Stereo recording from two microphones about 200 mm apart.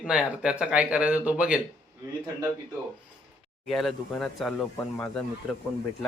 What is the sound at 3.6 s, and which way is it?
Speech, centre (ahead or behind).